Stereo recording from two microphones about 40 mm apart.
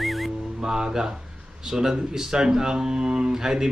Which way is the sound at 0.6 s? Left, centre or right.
Centre.